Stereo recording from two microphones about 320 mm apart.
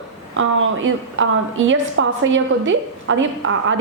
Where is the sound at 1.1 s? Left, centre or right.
Right.